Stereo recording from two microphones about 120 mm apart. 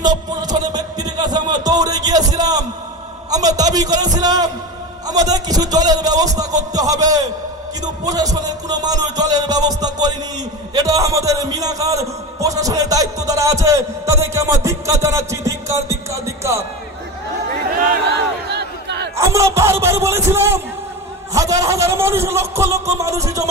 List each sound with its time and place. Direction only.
0.0 s a man's voice: 35° right (ahead or behind)
19.1 s a man's voice: 25° right (ahead or behind)